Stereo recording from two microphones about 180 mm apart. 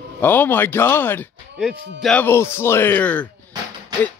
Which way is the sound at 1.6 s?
Centre (ahead or behind).